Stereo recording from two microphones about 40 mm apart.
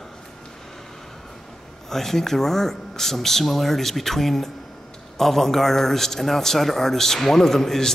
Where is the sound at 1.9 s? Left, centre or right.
Centre.